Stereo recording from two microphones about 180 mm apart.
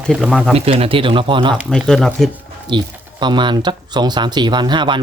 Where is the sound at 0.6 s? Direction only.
35° right (ahead or behind).